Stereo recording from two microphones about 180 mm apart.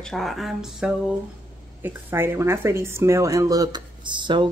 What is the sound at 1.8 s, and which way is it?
Speech, 15° right (ahead or behind).